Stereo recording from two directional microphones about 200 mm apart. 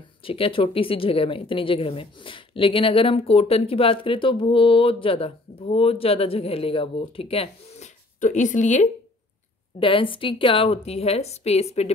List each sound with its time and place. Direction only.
0.2 s a woman's voice: 25° left (ahead or behind)
9.8 s a woman's voice: 25° left (ahead or behind)